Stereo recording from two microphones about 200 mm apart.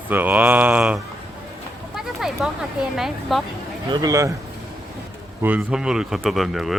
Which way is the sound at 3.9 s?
20° right (ahead or behind).